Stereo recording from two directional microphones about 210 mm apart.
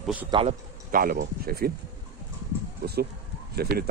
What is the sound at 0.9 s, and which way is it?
Speech, 45° right (ahead or behind).